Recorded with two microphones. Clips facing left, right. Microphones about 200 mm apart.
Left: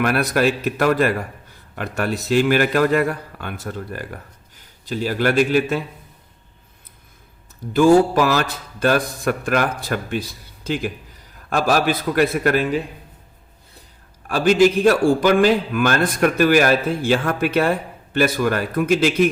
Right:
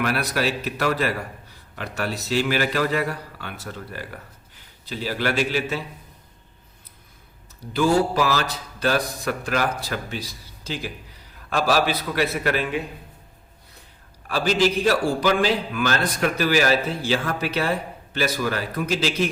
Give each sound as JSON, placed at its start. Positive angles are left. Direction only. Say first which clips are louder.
{"t": 0.0, "sound": "a man's voice", "louder": "left 6 dB", "side_deg": 50}
{"t": 7.7, "sound": "a man's voice", "louder": "left 7 dB", "side_deg": 50}
{"t": 14.3, "sound": "a man's voice", "louder": "left 6 dB", "side_deg": 50}